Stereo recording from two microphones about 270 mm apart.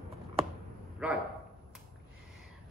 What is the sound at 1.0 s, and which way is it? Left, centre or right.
Speech, centre.